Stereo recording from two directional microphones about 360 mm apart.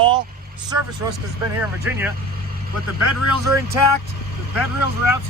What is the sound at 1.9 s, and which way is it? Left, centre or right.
Speech, centre.